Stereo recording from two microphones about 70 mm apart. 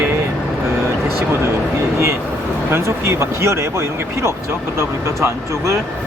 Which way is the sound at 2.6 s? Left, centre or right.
Right.